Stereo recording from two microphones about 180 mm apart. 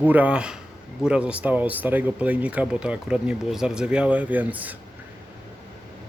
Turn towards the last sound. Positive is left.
turn(degrees=-10)  # may be behind; listen again after turning